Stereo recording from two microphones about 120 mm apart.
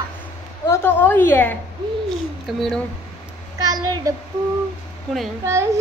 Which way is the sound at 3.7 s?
30° right (ahead or behind).